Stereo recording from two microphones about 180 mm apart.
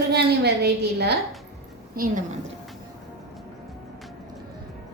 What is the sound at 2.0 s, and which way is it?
Speech, 55° right (ahead or behind).